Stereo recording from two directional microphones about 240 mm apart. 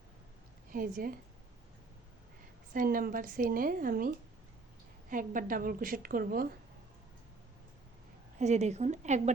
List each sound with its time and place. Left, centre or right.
0.7 s a woman's voice: right
2.7 s a woman's voice: right
8.4 s a woman's voice: right